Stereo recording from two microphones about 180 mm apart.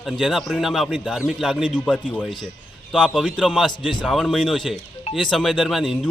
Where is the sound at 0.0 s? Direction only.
Centre (ahead or behind).